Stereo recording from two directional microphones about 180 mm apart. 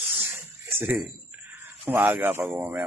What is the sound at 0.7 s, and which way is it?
Speech, 10° right (ahead or behind).